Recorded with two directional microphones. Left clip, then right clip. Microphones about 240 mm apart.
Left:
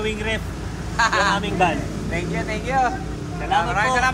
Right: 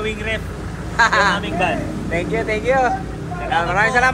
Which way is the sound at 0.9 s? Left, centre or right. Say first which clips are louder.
Right 4 dB; centre.